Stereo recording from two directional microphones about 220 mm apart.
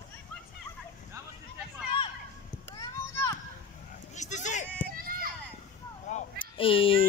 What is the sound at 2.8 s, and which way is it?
Children playing, 15° left (ahead or behind).